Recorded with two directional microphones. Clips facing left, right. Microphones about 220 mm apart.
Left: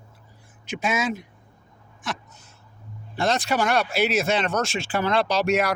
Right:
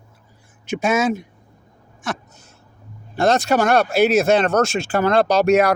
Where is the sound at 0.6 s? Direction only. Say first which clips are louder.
Right 7 dB; 45° right (ahead or behind).